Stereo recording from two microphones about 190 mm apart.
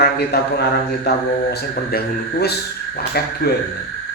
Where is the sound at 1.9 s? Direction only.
55° left (ahead or behind).